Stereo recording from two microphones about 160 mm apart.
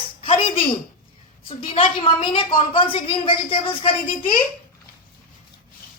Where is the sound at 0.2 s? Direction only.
35° left (ahead or behind).